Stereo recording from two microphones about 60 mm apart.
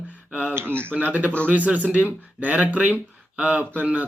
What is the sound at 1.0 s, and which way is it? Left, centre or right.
Speech, right.